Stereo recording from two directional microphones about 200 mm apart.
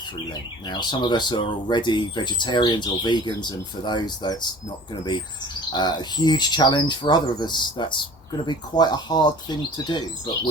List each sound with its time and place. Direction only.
0.7 s speech: 20° left (ahead or behind)
5.7 s speech: 20° left (ahead or behind)